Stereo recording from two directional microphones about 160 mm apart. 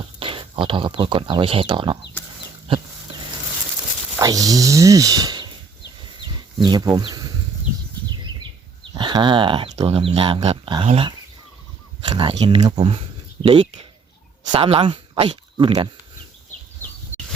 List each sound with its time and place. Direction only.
0.2 s speech: 35° right (ahead or behind)
2.6 s livestock: 30° right (ahead or behind)
4.2 s speech: 25° right (ahead or behind)
6.6 s speech: 25° right (ahead or behind)
8.8 s speech: 30° right (ahead or behind)